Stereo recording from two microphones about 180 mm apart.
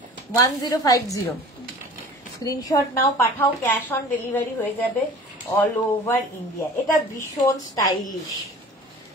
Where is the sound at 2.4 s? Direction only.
20° left (ahead or behind).